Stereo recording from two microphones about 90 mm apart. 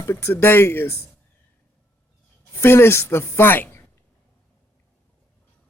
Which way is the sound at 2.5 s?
25° left (ahead or behind).